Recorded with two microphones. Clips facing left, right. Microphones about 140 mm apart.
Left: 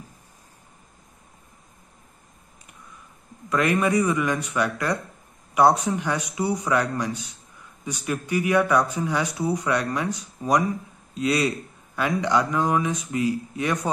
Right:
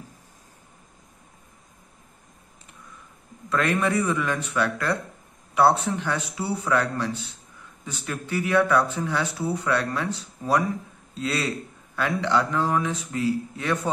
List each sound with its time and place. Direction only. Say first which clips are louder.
3.4 s speech: left 2 dB; 15° left (ahead or behind)